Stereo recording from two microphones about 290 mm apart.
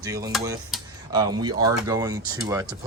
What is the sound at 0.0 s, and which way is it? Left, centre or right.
Speech, centre.